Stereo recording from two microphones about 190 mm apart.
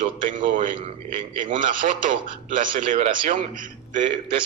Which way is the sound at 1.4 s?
45° right (ahead or behind).